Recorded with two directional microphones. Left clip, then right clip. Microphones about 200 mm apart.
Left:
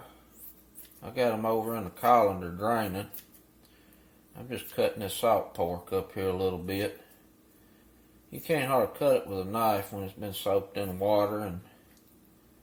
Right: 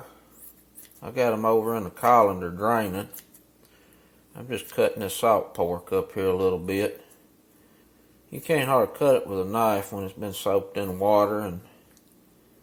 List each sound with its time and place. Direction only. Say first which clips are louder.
1.0 s speech: right 5 dB; 30° right (ahead or behind)
4.4 s speech: right 5 dB; 30° right (ahead or behind)
8.3 s speech: right 5 dB; 30° right (ahead or behind)